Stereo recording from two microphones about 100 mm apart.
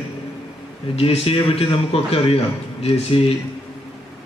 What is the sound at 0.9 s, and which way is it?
A man's voice, 80° left.